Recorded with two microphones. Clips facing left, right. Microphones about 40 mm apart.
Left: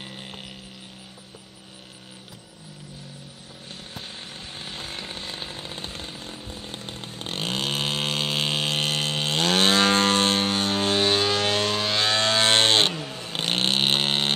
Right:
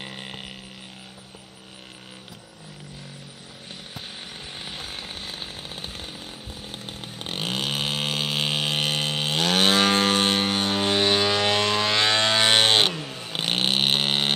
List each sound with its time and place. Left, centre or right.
0.0 s a sound: right
4.6 s chainsaw: centre; by 12.3 s right
12.3 s vehicle: right